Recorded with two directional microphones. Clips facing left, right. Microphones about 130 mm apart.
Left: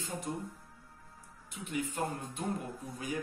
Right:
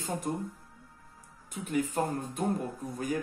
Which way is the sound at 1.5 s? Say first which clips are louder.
Right 6 dB; 45° right (ahead or behind).